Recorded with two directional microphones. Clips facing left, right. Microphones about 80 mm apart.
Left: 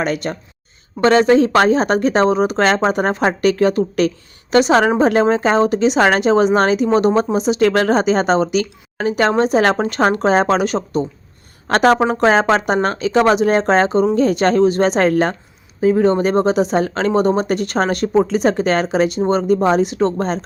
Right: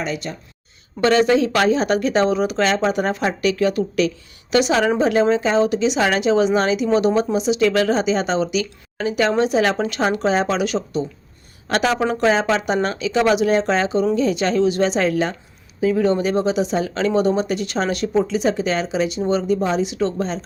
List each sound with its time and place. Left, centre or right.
0.0 s speech: left
1.0 s speech: left
15.8 s speech: left